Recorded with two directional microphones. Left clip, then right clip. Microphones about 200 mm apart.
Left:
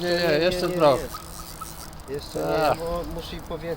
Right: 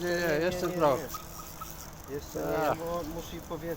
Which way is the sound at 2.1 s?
55° left (ahead or behind).